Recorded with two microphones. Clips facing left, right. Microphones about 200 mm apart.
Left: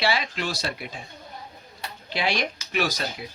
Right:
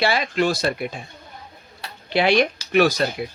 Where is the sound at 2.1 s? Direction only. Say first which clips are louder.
Right 9 dB; 60° right (ahead or behind).